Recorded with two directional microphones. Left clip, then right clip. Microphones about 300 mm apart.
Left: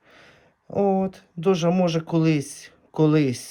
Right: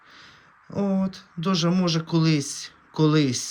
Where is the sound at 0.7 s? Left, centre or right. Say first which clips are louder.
Left 6 dB; centre.